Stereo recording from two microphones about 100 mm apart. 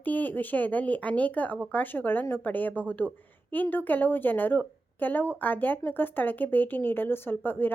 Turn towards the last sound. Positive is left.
turn(degrees=20)  # may be behind; listen again after turning